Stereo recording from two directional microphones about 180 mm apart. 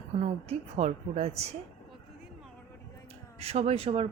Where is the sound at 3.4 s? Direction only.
35° right (ahead or behind).